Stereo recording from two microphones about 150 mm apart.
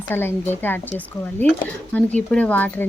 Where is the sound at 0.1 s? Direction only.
15° left (ahead or behind).